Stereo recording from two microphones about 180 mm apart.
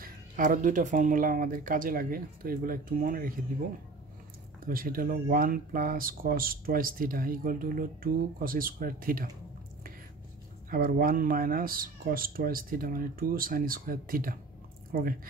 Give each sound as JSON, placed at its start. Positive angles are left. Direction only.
{"t": 0.0, "sound": "speech", "side_deg": -45}
{"t": 4.6, "sound": "speech", "side_deg": -55}
{"t": 10.7, "sound": "speech", "side_deg": -50}